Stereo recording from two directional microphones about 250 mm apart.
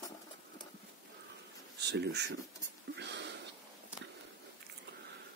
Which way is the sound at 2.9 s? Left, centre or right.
Right.